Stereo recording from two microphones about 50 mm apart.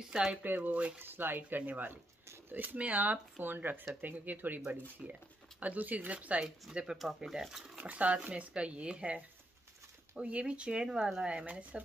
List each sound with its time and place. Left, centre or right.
0.0 s speech: centre
0.4 s speech: right
0.9 s speech: right
5.0 s speech: right
5.6 s speech: right
7.2 s speech: centre
7.7 s speech: right
10.2 s speech: centre
10.5 s speech: centre